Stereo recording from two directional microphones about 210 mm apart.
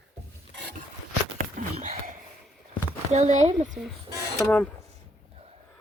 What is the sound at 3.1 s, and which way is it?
Speech, 35° right (ahead or behind).